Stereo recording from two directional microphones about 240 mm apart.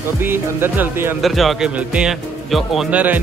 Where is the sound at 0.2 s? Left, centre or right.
Centre.